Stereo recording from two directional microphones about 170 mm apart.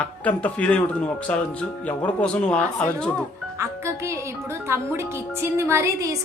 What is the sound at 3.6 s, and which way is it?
Music, 15° right (ahead or behind).